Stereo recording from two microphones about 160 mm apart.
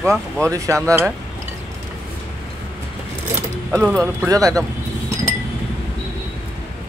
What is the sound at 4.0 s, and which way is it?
Speech, 20° right (ahead or behind).